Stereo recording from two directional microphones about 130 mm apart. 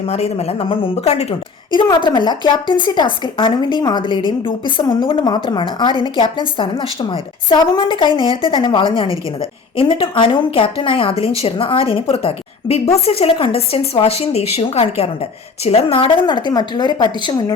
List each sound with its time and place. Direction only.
0.1 s speech: 55° left (ahead or behind)
1.7 s a woman's voice: 35° left (ahead or behind)